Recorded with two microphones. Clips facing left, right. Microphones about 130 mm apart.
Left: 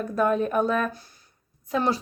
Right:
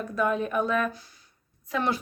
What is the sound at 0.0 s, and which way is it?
Speech, 40° left (ahead or behind).